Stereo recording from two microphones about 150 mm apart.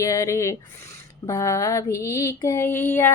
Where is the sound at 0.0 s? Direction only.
20° left (ahead or behind).